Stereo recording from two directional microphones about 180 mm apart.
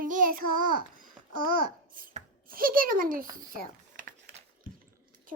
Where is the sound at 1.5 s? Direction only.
50° right (ahead or behind).